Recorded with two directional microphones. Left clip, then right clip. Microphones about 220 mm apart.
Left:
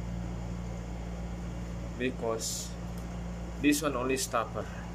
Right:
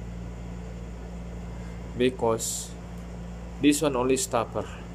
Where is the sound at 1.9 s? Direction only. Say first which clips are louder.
Right 8 dB; 20° right (ahead or behind).